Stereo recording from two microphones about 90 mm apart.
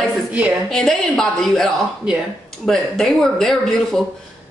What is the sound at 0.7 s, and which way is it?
A woman's voice, 5° left (ahead or behind).